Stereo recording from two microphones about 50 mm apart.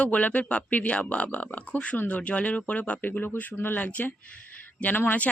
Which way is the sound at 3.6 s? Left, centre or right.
Left.